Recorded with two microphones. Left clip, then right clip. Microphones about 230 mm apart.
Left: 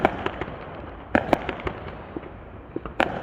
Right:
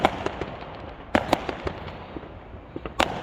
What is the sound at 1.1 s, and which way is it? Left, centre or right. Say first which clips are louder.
Fireworks: left 1 dB; centre.